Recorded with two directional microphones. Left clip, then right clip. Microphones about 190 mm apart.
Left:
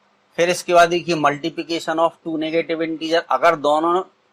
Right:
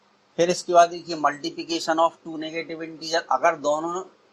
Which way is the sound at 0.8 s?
35° left (ahead or behind).